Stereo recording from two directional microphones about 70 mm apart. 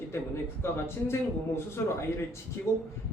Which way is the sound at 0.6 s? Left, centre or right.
Left.